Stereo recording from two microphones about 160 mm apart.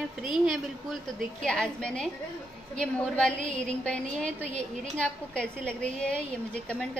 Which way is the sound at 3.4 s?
50° right (ahead or behind).